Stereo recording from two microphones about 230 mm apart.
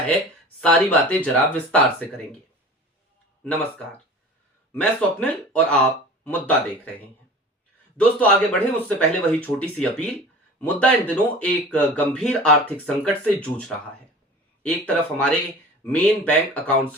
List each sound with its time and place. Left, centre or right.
0.6 s speech: centre
4.7 s speech: centre
7.9 s speech: centre